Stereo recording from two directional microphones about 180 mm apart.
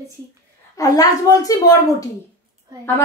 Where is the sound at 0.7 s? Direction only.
20° left (ahead or behind).